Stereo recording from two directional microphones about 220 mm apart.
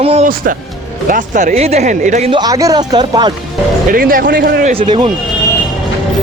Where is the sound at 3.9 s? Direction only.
40° right (ahead or behind).